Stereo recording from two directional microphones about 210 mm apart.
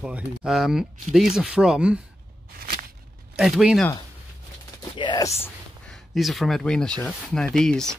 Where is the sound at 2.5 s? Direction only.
45° right (ahead or behind).